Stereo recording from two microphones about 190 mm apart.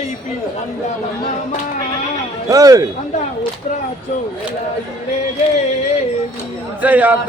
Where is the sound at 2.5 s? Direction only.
20° right (ahead or behind).